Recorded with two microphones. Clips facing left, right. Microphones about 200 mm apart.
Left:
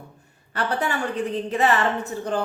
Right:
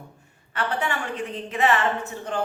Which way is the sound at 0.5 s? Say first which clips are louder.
Left 2 dB; 35° left (ahead or behind).